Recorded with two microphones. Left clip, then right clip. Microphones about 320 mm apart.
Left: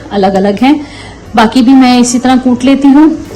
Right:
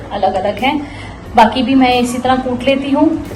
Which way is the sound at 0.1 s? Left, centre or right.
Left.